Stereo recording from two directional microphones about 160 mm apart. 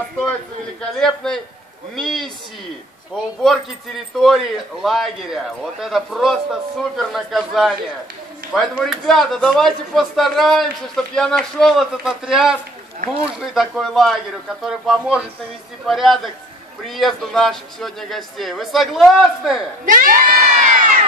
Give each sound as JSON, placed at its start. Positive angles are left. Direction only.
{"t": 0.9, "sound": "a man's voice", "side_deg": 5}
{"t": 3.4, "sound": "a man's voice", "side_deg": 0}
{"t": 8.7, "sound": "a man's voice", "side_deg": 0}
{"t": 19.9, "sound": "crowd", "side_deg": -60}